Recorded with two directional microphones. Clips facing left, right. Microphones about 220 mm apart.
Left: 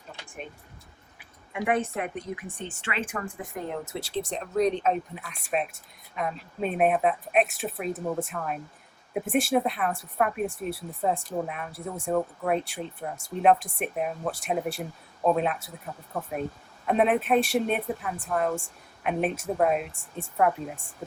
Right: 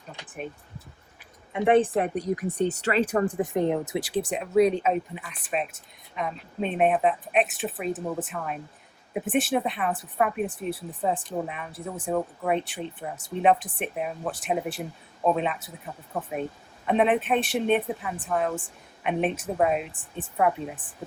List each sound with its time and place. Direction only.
1.5 s speech: 30° right (ahead or behind)
3.3 s speech: 25° right (ahead or behind); by 20.8 s centre (ahead or behind)